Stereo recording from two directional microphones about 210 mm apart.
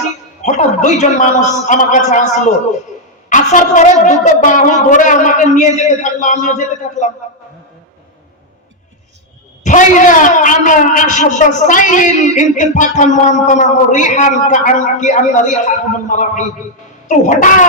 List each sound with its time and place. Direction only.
0.4 s a man's voice: 35° left (ahead or behind)
3.2 s a man's voice: 40° left (ahead or behind)
9.6 s a man's voice: 40° left (ahead or behind)